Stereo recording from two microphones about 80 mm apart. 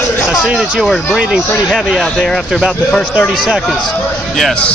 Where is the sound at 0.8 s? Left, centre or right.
Centre.